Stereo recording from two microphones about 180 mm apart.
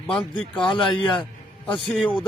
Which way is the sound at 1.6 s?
5° left (ahead or behind).